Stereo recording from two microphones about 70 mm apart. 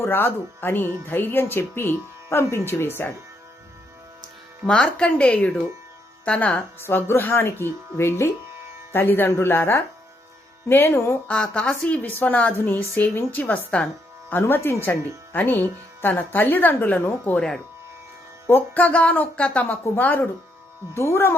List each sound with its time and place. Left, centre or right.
0.0 s speech: left
4.6 s speech: centre
6.7 s speech: left
11.3 s speech: centre
12.2 s speech: left
14.3 s speech: left; by 17.6 s centre
18.4 s speech: left
20.9 s speech: left